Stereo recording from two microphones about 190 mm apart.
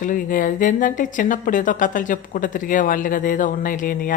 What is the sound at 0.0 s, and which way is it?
A woman's voice, 45° left (ahead or behind).